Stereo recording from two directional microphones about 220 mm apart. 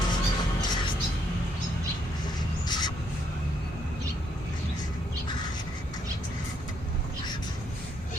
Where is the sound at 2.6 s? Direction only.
20° left (ahead or behind).